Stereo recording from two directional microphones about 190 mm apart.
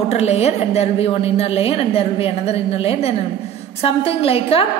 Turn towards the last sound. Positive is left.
turn(degrees=30)  # may be behind; listen again after turning